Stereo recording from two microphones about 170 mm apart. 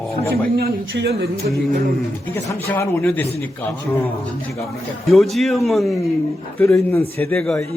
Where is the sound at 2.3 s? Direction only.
15° left (ahead or behind).